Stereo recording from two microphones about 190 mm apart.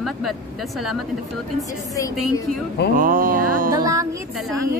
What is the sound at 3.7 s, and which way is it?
Speech, 20° right (ahead or behind).